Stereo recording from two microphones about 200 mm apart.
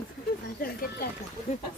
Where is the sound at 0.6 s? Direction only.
50° left (ahead or behind).